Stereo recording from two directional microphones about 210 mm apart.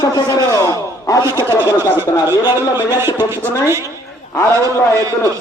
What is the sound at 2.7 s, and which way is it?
Speech, 10° right (ahead or behind).